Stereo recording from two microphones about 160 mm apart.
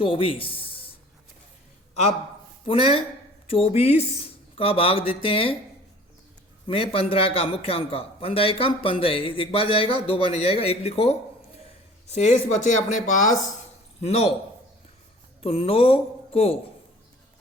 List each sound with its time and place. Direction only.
0.0 s speech: 35° left (ahead or behind)
2.6 s a man's voice: 35° left (ahead or behind)
6.7 s a man's voice: 35° left (ahead or behind); by 13.5 s 55° left (ahead or behind)
14.0 s a man's voice: 40° left (ahead or behind)
15.4 s a man's voice: 40° left (ahead or behind)